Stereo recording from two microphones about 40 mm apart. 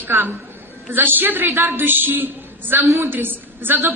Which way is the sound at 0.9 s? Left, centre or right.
Right.